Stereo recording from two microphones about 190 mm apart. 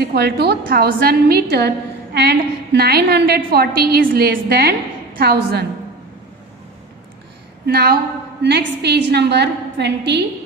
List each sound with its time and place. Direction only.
0.0 s a woman's voice: 60° right (ahead or behind)
7.6 s a woman's voice: 55° right (ahead or behind)